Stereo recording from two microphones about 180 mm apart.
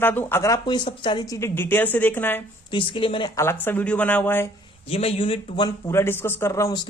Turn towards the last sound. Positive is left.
turn(degrees=15)  # may be behind; listen again after turning